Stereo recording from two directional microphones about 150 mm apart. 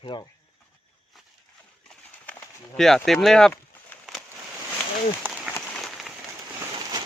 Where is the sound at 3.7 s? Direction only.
10° left (ahead or behind).